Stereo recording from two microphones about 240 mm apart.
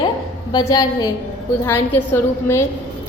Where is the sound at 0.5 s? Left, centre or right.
Centre.